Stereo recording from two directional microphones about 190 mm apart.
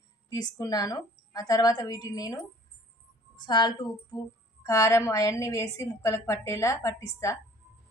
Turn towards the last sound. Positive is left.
turn(degrees=15)  # may be behind; listen again after turning